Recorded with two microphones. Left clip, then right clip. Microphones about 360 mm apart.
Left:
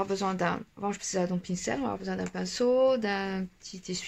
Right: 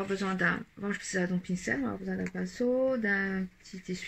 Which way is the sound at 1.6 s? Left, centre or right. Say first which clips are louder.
Left 2 dB; left.